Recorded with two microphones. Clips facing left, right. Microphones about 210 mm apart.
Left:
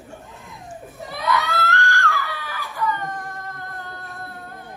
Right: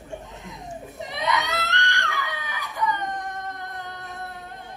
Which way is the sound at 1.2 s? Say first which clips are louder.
Left 3 dB; 20° right (ahead or behind).